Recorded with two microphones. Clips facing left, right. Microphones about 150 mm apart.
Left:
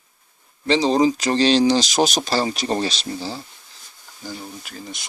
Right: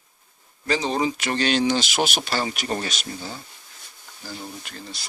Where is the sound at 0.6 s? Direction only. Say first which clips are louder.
Left 6 dB; 30° left (ahead or behind).